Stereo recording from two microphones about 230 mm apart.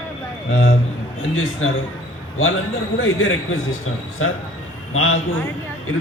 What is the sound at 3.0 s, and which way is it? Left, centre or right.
A man's voice, left.